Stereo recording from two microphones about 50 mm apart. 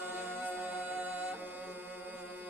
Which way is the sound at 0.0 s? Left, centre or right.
Right.